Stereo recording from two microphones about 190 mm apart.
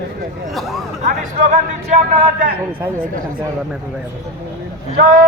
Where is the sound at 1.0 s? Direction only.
40° right (ahead or behind).